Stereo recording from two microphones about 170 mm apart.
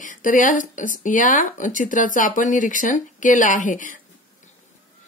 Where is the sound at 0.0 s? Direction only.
50° left (ahead or behind).